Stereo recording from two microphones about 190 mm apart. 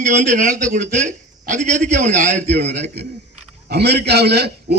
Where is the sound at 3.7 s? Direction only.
60° right (ahead or behind).